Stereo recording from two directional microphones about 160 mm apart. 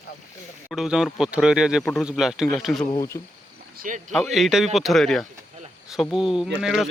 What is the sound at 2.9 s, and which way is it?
Speech, 25° left (ahead or behind).